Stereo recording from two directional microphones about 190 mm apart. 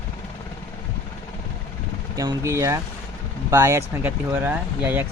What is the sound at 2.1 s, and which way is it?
Speech, 20° right (ahead or behind).